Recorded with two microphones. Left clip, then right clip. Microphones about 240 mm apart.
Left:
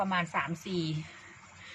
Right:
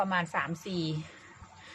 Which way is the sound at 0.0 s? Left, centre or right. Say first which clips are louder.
Right 1 dB; centre.